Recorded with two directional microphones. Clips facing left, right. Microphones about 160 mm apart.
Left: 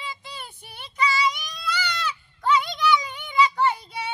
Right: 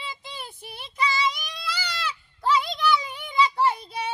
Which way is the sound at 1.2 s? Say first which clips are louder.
Left 2 dB; 30° right (ahead or behind).